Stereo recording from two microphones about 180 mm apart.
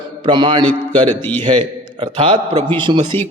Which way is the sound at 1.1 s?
10° left (ahead or behind).